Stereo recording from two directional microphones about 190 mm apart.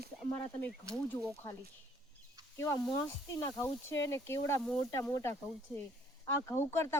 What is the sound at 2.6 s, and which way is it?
Speech, 15° left (ahead or behind).